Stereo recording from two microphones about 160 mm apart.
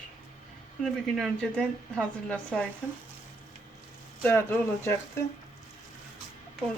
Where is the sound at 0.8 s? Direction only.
Centre (ahead or behind).